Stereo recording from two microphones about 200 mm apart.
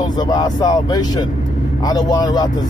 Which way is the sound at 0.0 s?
20° left (ahead or behind).